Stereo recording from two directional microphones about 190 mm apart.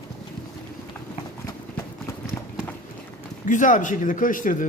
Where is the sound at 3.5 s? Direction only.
40° left (ahead or behind).